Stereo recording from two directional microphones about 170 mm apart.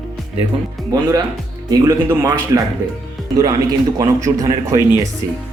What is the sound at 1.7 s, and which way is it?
A man's voice, 20° right (ahead or behind).